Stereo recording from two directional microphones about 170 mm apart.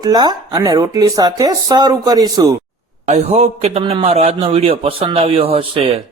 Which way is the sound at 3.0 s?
35° right (ahead or behind).